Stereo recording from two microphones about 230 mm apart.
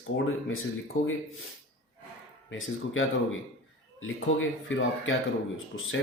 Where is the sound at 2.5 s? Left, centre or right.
Left.